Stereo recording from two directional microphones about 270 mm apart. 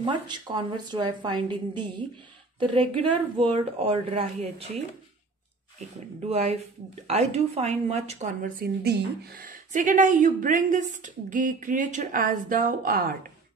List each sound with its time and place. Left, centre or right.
0.0 s a woman's voice: centre
6.2 s a woman's voice: right